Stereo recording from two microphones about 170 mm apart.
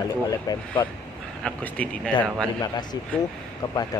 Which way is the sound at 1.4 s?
10° left (ahead or behind).